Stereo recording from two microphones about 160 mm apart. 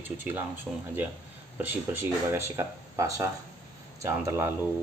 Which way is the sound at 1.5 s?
15° right (ahead or behind).